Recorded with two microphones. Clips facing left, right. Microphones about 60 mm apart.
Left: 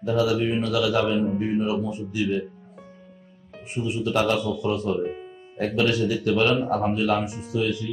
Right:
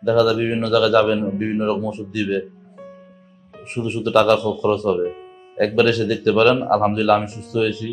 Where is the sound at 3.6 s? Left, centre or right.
Right.